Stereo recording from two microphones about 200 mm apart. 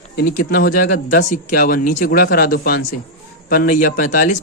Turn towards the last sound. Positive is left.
turn(degrees=40)  # may be behind; listen again after turning